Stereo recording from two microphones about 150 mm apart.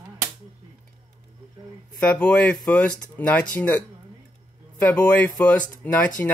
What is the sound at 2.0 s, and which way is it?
Speech, 5° left (ahead or behind).